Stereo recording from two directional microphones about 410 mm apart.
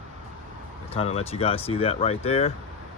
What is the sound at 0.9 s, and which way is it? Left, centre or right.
Speech, centre.